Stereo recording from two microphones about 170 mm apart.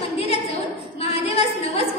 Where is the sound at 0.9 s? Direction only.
35° left (ahead or behind).